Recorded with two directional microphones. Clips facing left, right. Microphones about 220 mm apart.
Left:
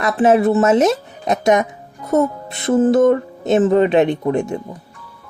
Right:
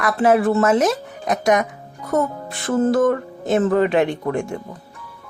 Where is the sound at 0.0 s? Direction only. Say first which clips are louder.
Left 3 dB; 25° left (ahead or behind).